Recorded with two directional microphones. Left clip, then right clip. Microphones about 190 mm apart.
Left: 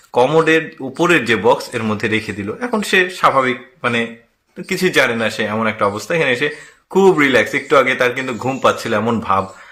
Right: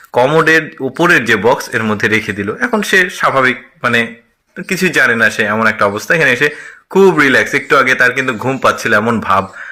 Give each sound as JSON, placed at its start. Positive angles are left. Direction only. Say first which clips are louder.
{"t": 0.1, "sound": "a man's voice", "louder": "right 3 dB", "side_deg": -15}